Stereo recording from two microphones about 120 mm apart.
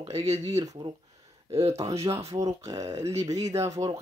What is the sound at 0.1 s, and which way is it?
Speech, 65° right (ahead or behind).